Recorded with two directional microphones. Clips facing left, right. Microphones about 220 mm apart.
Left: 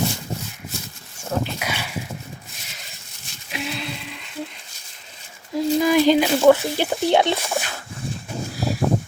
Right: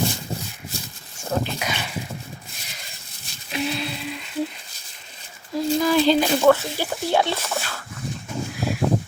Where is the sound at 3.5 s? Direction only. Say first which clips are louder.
Right 4 dB; centre (ahead or behind).